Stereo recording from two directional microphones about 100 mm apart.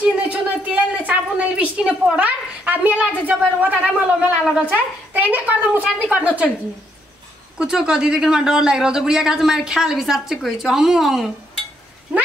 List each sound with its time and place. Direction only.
0.0 s a sound: 15° right (ahead or behind)
3.7 s a woman's voice: 10° right (ahead or behind)
7.5 s speech: 5° right (ahead or behind)